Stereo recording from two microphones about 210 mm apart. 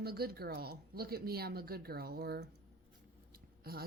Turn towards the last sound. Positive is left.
turn(degrees=-45)  # may be behind; listen again after turning